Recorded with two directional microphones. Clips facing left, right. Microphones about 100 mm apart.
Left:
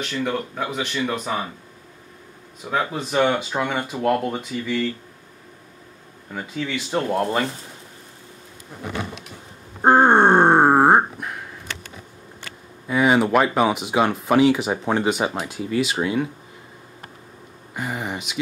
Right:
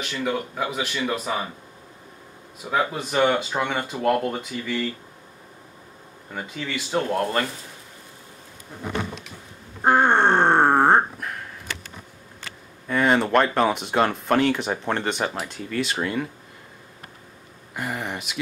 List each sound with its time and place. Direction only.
0.0 s speech: 5° right (ahead or behind)
2.6 s speech: 5° right (ahead or behind)
6.3 s speech: centre (ahead or behind)
9.8 s grunt: 30° left (ahead or behind)
10.0 s a sound: 15° left (ahead or behind)
12.8 s speech: 5° left (ahead or behind)
17.7 s speech: centre (ahead or behind)